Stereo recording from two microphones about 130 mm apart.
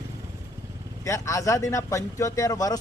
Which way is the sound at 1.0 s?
25° left (ahead or behind).